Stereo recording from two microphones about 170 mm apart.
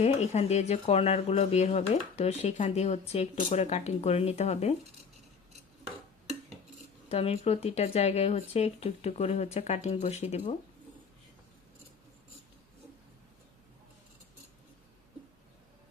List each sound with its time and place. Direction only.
0.0 s speech: 40° left (ahead or behind)
7.1 s speech: 35° left (ahead or behind)